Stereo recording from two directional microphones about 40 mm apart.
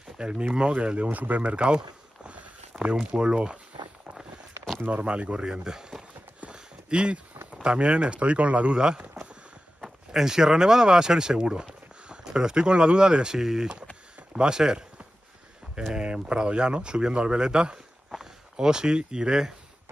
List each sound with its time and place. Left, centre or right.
0.2 s speech: right
4.8 s speech: right; by 6.0 s centre
6.5 s a sound: right
7.6 s speech: right
8.7 s a sound: centre
9.8 s speech: centre
13.4 s speech: centre
15.9 s speech: right